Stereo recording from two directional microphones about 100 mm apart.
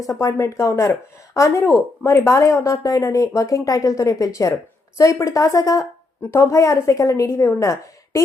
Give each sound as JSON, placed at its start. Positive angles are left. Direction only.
{"t": 0.0, "sound": "a woman's voice", "side_deg": 35}